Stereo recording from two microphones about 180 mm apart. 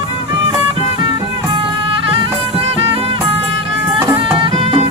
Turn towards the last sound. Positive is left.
turn(degrees=-30)  # may be behind; listen again after turning